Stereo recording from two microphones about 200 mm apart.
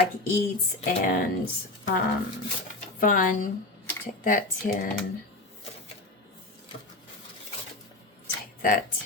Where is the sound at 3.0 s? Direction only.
45° left (ahead or behind).